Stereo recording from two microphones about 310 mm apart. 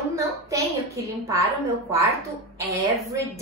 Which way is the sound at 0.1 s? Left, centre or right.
Centre.